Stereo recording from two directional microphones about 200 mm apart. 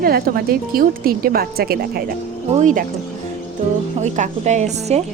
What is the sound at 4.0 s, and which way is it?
A woman's voice, 35° right (ahead or behind).